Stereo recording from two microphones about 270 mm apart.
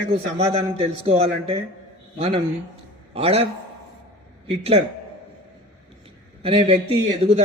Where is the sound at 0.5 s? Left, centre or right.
Right.